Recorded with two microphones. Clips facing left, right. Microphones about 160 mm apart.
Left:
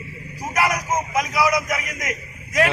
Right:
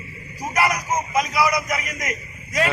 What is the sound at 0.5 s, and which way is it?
Speech, 10° left (ahead or behind).